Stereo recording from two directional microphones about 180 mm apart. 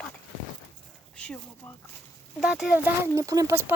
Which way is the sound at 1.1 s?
5° left (ahead or behind).